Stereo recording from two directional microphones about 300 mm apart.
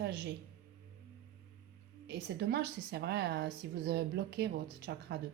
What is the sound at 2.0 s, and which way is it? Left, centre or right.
Speech, right.